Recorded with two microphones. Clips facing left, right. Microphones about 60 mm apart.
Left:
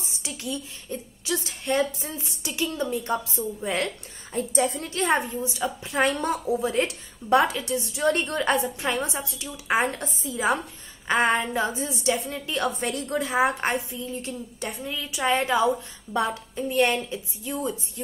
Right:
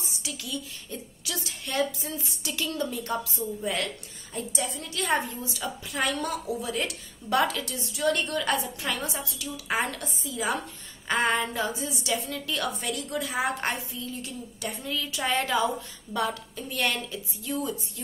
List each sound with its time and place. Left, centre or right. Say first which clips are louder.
0.0 s a woman's voice: left 3 dB; left
14.8 s a woman's voice: left 2 dB; centre